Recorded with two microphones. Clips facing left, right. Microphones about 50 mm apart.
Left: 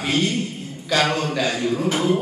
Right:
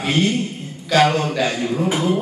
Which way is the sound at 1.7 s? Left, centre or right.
Centre.